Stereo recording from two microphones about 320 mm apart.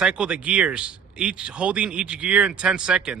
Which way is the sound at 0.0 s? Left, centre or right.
Centre.